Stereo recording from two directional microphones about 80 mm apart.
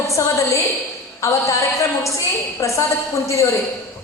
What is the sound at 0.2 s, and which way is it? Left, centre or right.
A man's voice, left.